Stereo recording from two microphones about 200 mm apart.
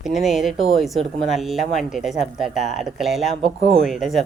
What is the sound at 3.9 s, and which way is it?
Speech, centre (ahead or behind).